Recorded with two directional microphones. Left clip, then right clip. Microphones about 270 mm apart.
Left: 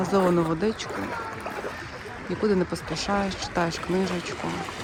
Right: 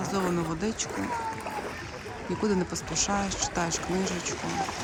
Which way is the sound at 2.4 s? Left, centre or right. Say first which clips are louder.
Left 5 dB; centre.